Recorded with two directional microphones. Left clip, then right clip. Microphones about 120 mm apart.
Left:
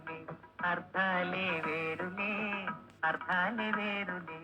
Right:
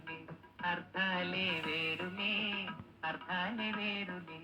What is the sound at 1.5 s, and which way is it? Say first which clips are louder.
Music: left 1 dB; 35° left (ahead or behind).